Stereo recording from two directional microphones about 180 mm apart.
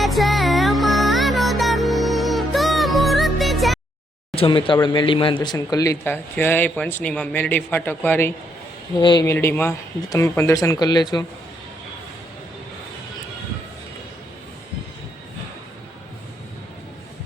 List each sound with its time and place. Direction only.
0.0 s music: centre (ahead or behind)
4.4 s speech: 30° left (ahead or behind); by 8.3 s 10° left (ahead or behind)
9.0 s speech: 25° left (ahead or behind)
9.3 s speech: 15° left (ahead or behind)